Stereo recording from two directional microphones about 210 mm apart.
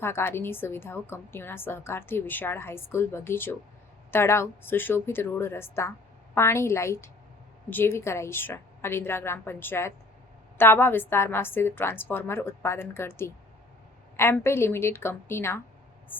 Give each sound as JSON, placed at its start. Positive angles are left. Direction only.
{"t": 0.0, "sound": "a woman's voice", "side_deg": 10}